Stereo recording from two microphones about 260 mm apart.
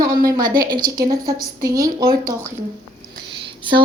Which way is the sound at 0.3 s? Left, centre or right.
Centre.